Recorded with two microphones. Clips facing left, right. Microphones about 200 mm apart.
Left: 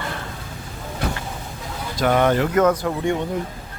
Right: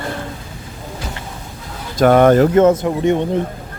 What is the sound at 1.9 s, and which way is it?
Speech, 50° right (ahead or behind).